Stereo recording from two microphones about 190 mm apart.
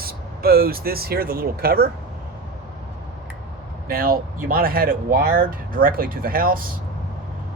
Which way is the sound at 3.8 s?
50° right (ahead or behind).